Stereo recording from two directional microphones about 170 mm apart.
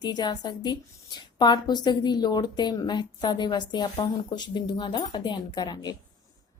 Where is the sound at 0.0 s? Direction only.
25° left (ahead or behind).